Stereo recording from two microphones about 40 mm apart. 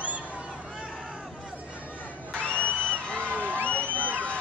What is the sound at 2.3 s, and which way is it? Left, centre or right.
Crowd, left.